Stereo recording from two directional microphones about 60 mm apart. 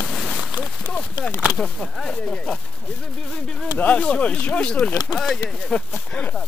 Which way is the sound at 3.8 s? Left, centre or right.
Centre.